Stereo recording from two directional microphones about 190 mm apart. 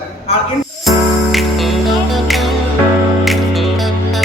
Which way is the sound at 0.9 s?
Centre (ahead or behind).